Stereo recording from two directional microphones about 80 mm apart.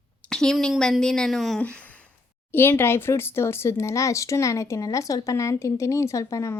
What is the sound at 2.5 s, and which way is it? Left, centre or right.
Speech, left.